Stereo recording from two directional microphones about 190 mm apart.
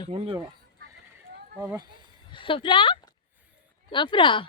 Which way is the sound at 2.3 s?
25° left (ahead or behind).